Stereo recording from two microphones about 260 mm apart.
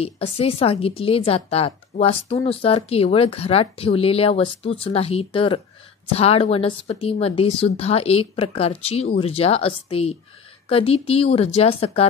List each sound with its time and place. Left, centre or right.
0.0 s a woman's voice: left